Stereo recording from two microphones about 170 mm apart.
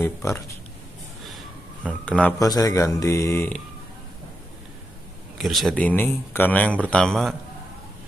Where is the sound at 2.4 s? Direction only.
20° left (ahead or behind).